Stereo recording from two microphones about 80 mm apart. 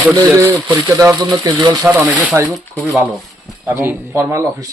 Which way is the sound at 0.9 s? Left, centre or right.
Right.